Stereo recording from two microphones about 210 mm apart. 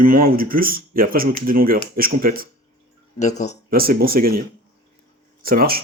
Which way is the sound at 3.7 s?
45° right (ahead or behind).